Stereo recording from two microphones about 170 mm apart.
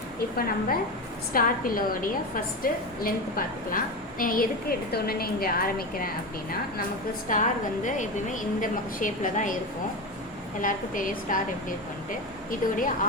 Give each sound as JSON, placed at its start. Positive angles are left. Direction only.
{"t": 0.3, "sound": "a woman's voice", "side_deg": 60}
{"t": 7.3, "sound": "a woman's voice", "side_deg": 50}
{"t": 10.6, "sound": "a woman's voice", "side_deg": 50}
{"t": 12.5, "sound": "a woman's voice", "side_deg": 50}